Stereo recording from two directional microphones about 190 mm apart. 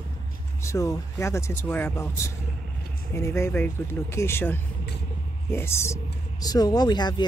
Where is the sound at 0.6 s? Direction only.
15° left (ahead or behind).